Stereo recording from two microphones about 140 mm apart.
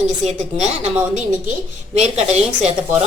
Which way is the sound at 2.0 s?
50° right (ahead or behind).